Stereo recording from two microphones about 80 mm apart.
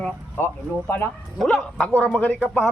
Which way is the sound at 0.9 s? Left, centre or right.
Left.